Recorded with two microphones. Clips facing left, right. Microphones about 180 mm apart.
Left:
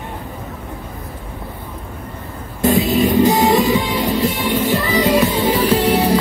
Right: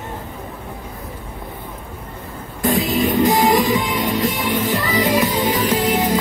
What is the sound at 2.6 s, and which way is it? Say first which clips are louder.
Music: left 3 dB; 25° left (ahead or behind).